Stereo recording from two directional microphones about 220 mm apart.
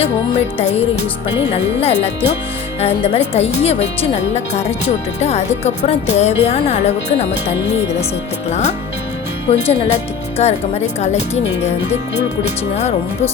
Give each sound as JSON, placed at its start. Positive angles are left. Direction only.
{"t": 0.0, "sound": "speech", "side_deg": 30}
{"t": 8.4, "sound": "speech", "side_deg": 30}
{"t": 12.7, "sound": "speech", "side_deg": 30}